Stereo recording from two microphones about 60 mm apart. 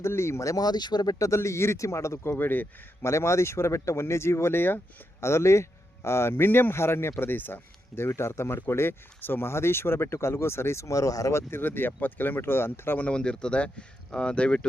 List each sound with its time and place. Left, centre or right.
0.0 s speech: left
1.3 s speech: left
2.4 s speech: left
3.0 s speech: left
5.2 s speech: left
11.3 s speech: left
13.0 s speech: centre